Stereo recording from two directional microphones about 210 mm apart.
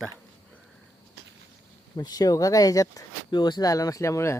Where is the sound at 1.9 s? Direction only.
20° left (ahead or behind).